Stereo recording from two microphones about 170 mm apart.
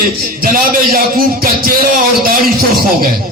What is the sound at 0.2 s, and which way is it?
A man's voice, 60° right (ahead or behind).